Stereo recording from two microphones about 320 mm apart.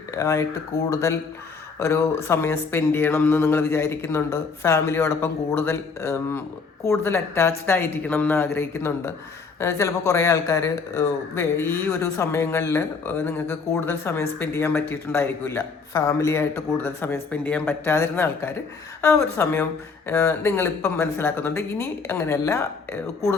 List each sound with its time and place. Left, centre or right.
0.1 s speech: centre